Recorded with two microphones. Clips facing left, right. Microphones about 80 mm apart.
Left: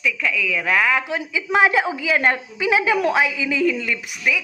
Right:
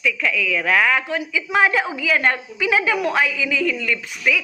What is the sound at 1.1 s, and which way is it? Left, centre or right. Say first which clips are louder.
A woman's voice: even; left.